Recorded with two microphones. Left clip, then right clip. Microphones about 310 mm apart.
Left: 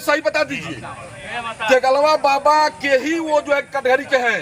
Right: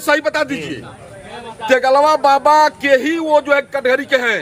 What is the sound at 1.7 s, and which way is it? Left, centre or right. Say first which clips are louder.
A man's voice: right 3 dB; centre.